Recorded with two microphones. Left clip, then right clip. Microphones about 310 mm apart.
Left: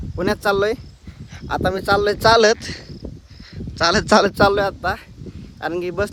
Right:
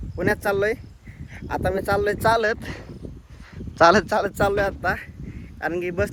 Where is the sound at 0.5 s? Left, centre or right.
Centre.